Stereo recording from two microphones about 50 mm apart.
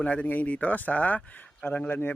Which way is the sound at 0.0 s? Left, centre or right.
Left.